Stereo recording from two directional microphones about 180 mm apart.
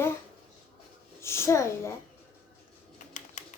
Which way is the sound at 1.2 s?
15° left (ahead or behind).